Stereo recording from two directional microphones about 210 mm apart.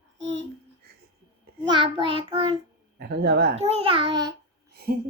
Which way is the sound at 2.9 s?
50° right (ahead or behind).